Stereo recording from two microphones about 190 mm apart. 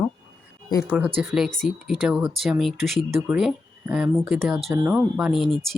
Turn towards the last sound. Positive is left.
turn(degrees=0)  # may be behind; listen again after turning